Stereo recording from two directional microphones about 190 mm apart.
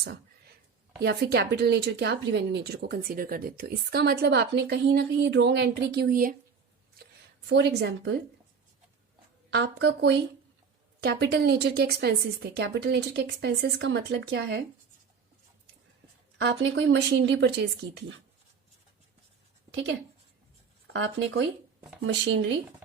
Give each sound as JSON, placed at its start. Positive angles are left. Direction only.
{"t": 0.9, "sound": "speech", "side_deg": -60}
{"t": 7.4, "sound": "speech", "side_deg": -70}
{"t": 9.5, "sound": "speech", "side_deg": -60}
{"t": 16.4, "sound": "speech", "side_deg": -70}
{"t": 20.9, "sound": "speech", "side_deg": -80}